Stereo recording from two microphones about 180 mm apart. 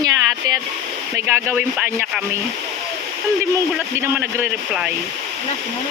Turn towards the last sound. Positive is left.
turn(degrees=-10)  # may be behind; listen again after turning